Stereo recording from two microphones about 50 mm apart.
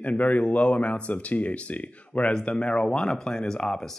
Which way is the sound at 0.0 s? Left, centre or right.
Left.